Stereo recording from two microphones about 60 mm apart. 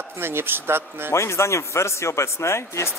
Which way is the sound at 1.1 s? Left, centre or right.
Left.